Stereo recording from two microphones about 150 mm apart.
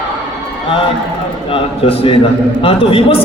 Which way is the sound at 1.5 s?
40° left (ahead or behind).